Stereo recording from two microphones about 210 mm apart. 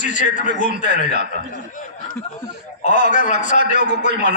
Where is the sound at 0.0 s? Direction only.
35° left (ahead or behind).